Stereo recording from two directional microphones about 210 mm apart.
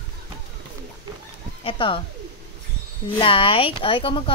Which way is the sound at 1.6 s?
25° left (ahead or behind).